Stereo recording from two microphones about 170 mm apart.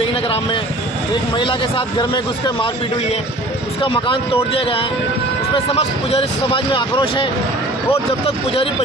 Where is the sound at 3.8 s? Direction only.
30° left (ahead or behind).